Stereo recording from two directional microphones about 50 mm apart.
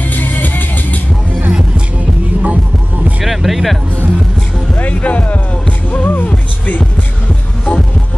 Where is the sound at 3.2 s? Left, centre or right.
Centre.